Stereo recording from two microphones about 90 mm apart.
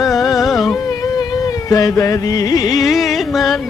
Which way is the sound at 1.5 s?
40° left (ahead or behind).